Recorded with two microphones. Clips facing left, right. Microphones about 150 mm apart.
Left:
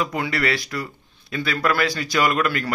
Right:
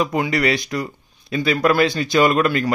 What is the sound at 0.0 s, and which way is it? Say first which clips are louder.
Speech: right 4 dB; 20° right (ahead or behind).